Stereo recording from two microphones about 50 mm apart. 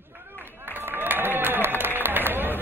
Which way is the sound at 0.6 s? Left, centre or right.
Right.